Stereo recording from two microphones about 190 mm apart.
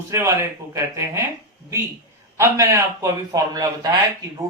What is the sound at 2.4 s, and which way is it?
Speech, 15° right (ahead or behind).